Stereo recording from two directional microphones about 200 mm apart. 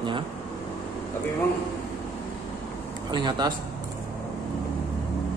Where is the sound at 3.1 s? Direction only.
20° right (ahead or behind).